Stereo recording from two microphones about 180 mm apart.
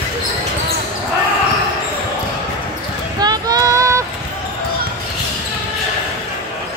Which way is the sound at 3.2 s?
20° right (ahead or behind).